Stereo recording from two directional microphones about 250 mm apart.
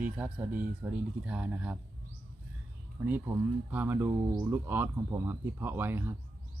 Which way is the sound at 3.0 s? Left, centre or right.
Centre.